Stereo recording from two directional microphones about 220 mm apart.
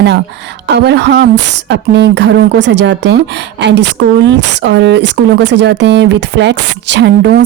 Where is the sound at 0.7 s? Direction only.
50° right (ahead or behind).